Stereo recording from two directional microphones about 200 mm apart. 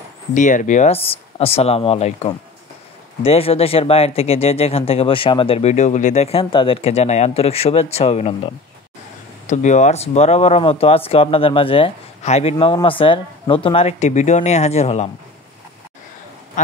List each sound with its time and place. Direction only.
0.3 s speech: 40° left (ahead or behind)
9.5 s speech: 35° left (ahead or behind)
16.6 s duck: 40° left (ahead or behind)